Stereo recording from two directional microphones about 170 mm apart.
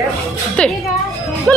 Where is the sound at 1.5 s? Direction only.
5° left (ahead or behind).